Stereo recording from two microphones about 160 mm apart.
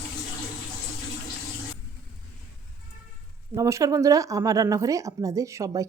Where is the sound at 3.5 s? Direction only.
20° right (ahead or behind).